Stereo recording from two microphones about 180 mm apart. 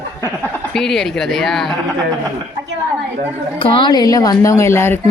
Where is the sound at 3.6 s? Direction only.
30° left (ahead or behind).